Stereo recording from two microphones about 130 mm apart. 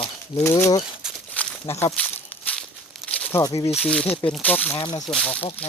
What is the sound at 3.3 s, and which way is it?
Speech, 30° left (ahead or behind).